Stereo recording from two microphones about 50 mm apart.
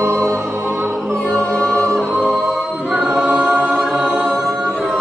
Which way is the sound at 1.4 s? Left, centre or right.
Centre.